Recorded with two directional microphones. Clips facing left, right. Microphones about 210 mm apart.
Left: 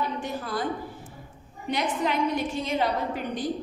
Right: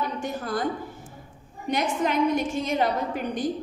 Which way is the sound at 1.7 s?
45° right (ahead or behind).